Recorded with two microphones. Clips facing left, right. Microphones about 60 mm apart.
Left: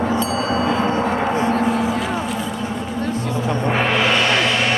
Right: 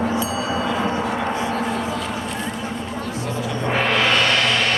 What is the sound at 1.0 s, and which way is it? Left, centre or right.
Gong, left.